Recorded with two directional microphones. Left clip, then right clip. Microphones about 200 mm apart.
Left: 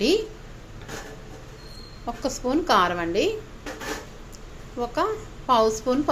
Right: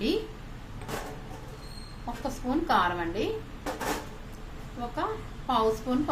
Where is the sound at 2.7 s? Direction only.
40° left (ahead or behind).